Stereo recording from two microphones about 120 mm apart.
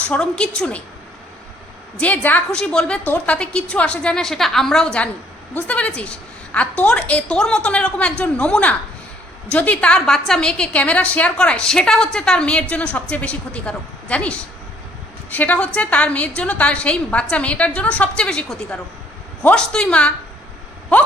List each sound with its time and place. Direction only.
0.0 s a woman's voice: 10° left (ahead or behind)
2.0 s a woman's voice: 15° left (ahead or behind)